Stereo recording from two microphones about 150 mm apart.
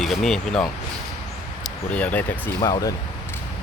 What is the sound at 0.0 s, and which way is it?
Speech, centre (ahead or behind).